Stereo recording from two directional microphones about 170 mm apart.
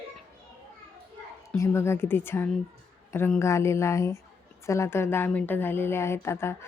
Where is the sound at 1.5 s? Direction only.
15° left (ahead or behind).